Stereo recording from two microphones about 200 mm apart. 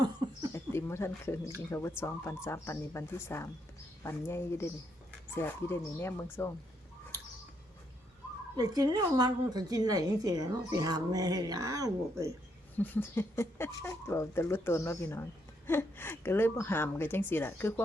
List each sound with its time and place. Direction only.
0.5 s a sound: 15° left (ahead or behind)
1.7 s speech: 10° left (ahead or behind)
8.5 s a woman's voice: 20° right (ahead or behind)
12.7 s speech: 10° left (ahead or behind)